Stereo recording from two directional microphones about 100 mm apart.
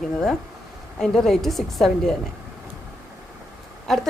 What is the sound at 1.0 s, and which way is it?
A woman's voice, 5° left (ahead or behind).